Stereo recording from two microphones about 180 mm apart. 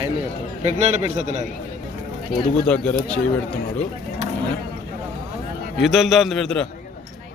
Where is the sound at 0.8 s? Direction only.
40° right (ahead or behind).